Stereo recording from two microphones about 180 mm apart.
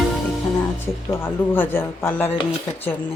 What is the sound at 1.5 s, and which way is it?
Speech, 10° left (ahead or behind).